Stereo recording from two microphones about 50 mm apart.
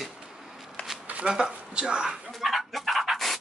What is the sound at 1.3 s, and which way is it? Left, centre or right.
Speech, centre.